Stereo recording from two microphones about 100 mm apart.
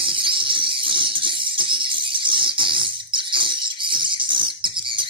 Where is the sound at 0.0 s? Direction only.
60° right (ahead or behind).